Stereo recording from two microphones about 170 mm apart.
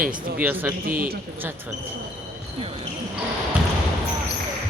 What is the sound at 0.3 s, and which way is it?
Speech, 10° right (ahead or behind).